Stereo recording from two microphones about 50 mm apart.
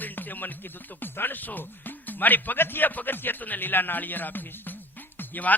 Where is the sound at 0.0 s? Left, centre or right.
Left.